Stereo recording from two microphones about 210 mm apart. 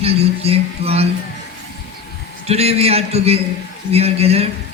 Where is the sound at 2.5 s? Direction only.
30° right (ahead or behind).